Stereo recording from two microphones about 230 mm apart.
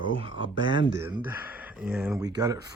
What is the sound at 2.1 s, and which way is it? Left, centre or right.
Speech, centre.